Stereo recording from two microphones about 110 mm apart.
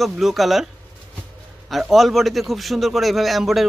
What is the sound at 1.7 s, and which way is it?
A man's voice, centre (ahead or behind).